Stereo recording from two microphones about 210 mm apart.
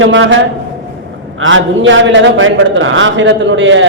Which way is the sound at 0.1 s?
65° right (ahead or behind).